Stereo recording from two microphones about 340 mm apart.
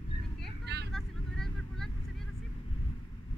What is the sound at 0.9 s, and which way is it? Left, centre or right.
Vehicle, centre.